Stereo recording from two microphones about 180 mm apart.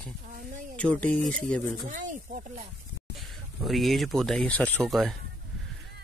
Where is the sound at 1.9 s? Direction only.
45° right (ahead or behind).